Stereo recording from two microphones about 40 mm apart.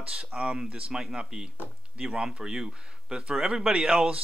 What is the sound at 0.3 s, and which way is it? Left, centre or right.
Speech, right.